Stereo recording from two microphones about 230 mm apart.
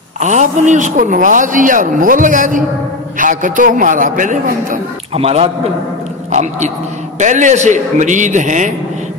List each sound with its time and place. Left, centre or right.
0.2 s a man's voice: right
7.2 s a man's voice: right